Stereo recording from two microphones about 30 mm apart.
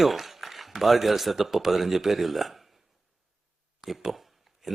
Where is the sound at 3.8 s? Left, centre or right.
Centre.